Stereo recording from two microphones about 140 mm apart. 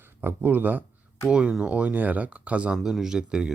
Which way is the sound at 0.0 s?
15° right (ahead or behind).